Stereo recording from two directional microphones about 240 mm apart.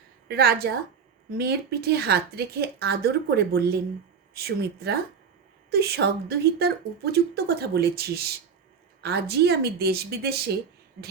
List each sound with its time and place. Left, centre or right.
0.3 s speech: right